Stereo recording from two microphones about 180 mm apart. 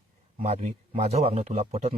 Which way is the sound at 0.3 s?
35° right (ahead or behind).